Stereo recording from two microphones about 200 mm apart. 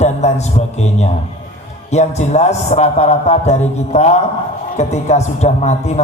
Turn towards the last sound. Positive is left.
turn(degrees=35)  # may be behind; listen again after turning